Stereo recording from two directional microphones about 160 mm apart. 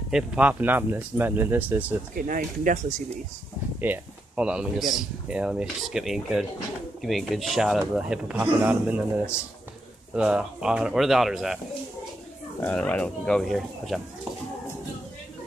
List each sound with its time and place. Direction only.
0.1 s speech: 10° right (ahead or behind)
2.1 s speech: 60° right (ahead or behind)
3.8 s speech: 10° right (ahead or behind)
12.6 s speech: 10° left (ahead or behind)